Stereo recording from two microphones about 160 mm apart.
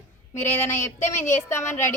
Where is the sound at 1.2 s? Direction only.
15° left (ahead or behind).